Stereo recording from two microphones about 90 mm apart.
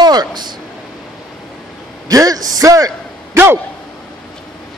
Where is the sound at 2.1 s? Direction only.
45° right (ahead or behind).